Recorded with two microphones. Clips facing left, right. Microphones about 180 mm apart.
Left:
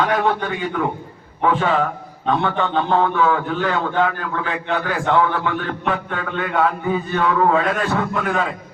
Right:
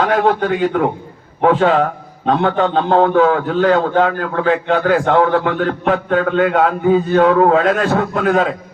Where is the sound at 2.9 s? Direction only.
60° right (ahead or behind).